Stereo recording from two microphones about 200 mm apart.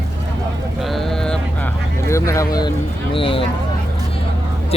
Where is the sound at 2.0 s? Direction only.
15° left (ahead or behind).